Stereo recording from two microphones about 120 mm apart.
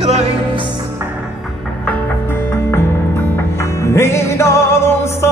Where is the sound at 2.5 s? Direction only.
20° left (ahead or behind).